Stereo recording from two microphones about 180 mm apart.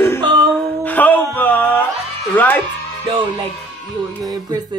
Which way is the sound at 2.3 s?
10° left (ahead or behind).